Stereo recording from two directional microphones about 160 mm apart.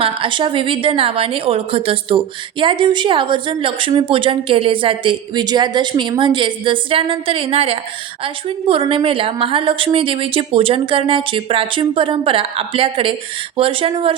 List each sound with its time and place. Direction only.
0.0 s a woman's voice: 30° right (ahead or behind)